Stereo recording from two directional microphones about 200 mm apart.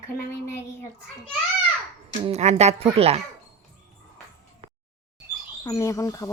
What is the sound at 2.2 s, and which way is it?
Speech, 35° right (ahead or behind).